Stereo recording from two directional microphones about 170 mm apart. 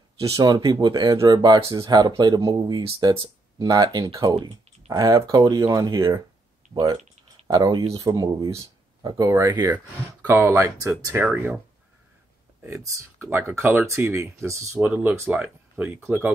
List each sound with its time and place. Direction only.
0.2 s speech: 20° right (ahead or behind)
12.8 s speech: 15° right (ahead or behind)